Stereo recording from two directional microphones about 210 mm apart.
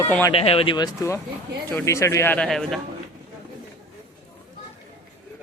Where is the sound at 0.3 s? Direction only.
25° left (ahead or behind); by 2.8 s centre (ahead or behind).